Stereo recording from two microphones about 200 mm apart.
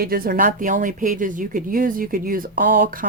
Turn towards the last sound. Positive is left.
turn(degrees=-45)  # may be behind; listen again after turning